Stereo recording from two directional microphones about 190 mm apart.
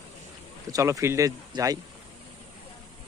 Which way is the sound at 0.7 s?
15° right (ahead or behind).